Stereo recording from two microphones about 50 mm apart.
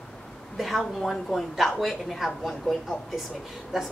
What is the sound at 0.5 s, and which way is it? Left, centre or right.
A woman's voice, centre.